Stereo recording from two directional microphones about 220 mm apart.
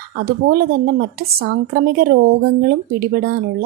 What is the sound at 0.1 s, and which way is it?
Speech, 45° right (ahead or behind).